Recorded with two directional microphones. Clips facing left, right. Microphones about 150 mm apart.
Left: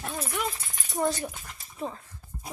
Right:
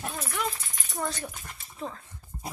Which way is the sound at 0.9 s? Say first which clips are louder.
Left 6 dB; 15° left (ahead or behind).